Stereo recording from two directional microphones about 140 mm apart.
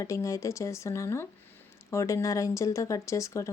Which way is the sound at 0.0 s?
20° left (ahead or behind).